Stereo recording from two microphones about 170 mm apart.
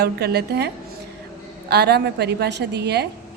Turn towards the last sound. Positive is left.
turn(degrees=-75)  # may be behind; listen again after turning